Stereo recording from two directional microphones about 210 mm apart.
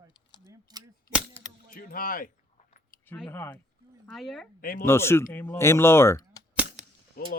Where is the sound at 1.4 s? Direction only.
30° right (ahead or behind).